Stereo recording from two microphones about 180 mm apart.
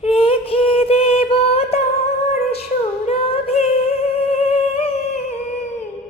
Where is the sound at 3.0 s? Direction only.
35° left (ahead or behind).